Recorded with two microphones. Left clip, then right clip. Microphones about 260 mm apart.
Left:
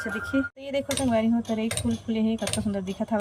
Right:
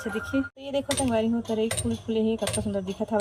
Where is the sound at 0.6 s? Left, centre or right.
Centre.